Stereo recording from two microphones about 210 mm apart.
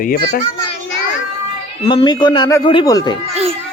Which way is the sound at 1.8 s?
20° left (ahead or behind).